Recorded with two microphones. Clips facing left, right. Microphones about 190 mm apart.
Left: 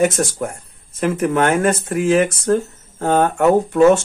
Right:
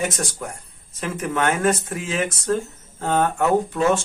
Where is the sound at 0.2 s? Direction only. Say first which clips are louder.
Left 8 dB; 45° left (ahead or behind).